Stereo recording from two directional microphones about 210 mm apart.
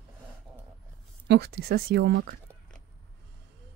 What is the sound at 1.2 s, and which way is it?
Speech, 55° right (ahead or behind).